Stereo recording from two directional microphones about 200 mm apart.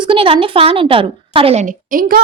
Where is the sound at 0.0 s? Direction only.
25° right (ahead or behind).